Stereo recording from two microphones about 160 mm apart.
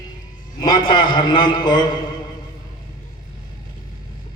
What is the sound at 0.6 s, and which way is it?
A man's voice, 30° left (ahead or behind).